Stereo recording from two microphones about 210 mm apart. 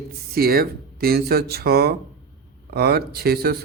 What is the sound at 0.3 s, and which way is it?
Speech, 45° right (ahead or behind).